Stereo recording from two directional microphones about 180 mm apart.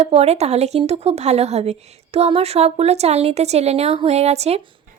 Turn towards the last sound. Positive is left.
turn(degrees=-35)  # may be behind; listen again after turning